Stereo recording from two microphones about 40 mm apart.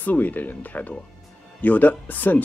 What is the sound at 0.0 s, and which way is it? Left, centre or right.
Speech, left.